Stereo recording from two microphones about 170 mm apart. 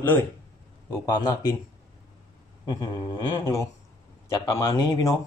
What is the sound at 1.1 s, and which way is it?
Speech, 25° left (ahead or behind).